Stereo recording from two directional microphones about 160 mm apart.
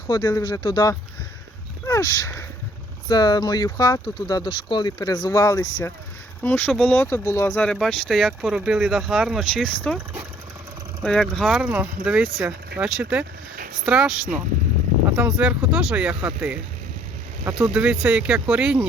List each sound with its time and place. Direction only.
0.1 s speech: 25° left (ahead or behind); by 10.0 s 5° left (ahead or behind)
11.0 s speech: centre (ahead or behind)
15.1 s speech: 5° right (ahead or behind)